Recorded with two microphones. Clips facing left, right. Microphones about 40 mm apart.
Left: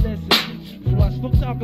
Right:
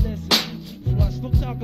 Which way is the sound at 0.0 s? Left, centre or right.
Left.